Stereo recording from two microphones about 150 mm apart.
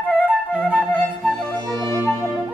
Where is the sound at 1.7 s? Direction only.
25° right (ahead or behind).